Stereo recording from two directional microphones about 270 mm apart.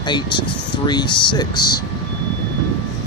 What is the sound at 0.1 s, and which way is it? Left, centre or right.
Speech, centre.